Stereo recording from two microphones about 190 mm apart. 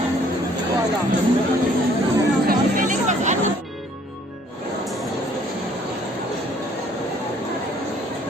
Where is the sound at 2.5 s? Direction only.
40° right (ahead or behind).